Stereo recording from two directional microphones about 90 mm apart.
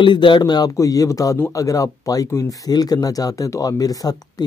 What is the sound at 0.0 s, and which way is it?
Speech, 65° left (ahead or behind).